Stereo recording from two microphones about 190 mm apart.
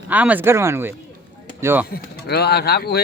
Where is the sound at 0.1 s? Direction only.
10° right (ahead or behind).